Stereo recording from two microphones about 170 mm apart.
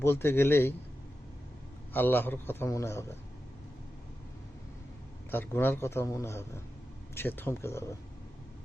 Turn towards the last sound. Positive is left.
turn(degrees=15)  # may be behind; listen again after turning